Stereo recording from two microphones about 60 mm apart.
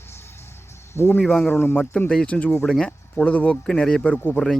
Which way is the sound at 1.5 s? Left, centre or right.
Left.